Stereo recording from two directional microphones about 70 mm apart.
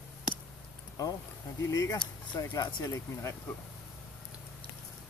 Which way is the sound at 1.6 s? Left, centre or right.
Left.